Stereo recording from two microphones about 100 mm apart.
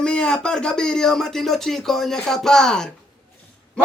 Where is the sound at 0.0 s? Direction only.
10° left (ahead or behind).